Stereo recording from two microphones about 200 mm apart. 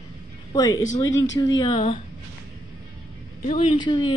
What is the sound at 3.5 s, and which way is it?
Speech, 30° left (ahead or behind).